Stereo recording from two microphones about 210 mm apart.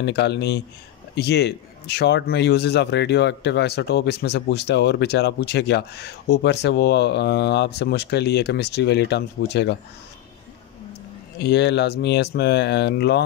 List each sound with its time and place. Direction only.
0.0 s speech: 55° left (ahead or behind)
11.3 s speech: 55° left (ahead or behind)